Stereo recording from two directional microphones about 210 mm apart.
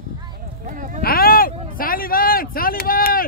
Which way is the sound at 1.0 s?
45° left (ahead or behind).